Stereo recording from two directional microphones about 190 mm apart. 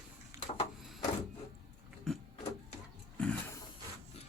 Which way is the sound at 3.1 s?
5° left (ahead or behind).